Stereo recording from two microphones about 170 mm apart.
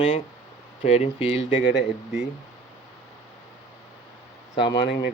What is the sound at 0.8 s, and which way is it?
Speech, 40° left (ahead or behind).